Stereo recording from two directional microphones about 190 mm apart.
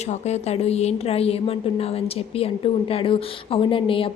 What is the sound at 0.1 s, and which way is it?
A woman's voice, 35° left (ahead or behind).